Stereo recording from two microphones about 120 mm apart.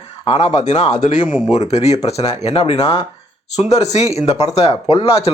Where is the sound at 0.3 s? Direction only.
65° left (ahead or behind).